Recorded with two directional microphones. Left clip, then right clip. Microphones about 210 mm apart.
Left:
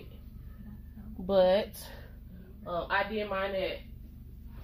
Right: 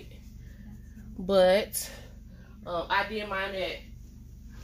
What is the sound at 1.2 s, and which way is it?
Speech, 35° right (ahead or behind).